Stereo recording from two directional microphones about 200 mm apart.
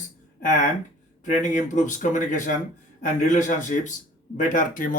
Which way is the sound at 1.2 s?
40° left (ahead or behind).